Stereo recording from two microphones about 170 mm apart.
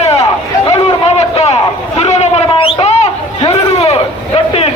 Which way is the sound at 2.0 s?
40° left (ahead or behind).